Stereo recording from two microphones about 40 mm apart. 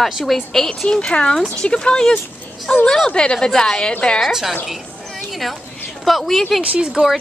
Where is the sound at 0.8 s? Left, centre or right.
Left.